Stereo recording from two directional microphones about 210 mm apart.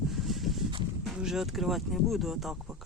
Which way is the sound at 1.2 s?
Centre (ahead or behind).